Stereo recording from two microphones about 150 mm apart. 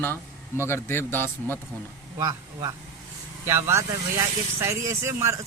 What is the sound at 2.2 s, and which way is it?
Speech, 25° right (ahead or behind).